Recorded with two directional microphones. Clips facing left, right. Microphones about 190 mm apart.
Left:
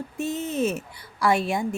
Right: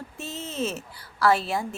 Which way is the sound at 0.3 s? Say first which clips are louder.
Left 5 dB; 15° left (ahead or behind).